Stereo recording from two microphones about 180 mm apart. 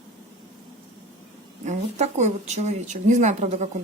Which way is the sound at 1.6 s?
40° right (ahead or behind).